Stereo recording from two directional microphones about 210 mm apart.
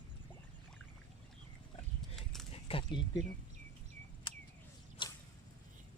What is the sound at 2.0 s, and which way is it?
Dog, centre (ahead or behind).